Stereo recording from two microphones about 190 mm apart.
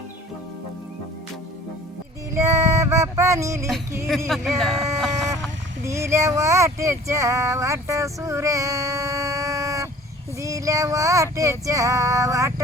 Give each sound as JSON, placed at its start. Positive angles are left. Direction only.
{"t": 2.3, "sound": "music", "side_deg": -15}
{"t": 4.3, "sound": "speech", "side_deg": 0}
{"t": 5.8, "sound": "speech", "side_deg": -15}
{"t": 10.4, "sound": "female singing", "side_deg": -15}